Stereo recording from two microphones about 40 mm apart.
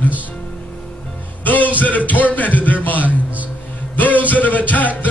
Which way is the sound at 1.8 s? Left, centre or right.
Left.